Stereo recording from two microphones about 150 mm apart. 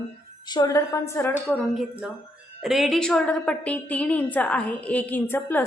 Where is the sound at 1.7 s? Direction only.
Centre (ahead or behind).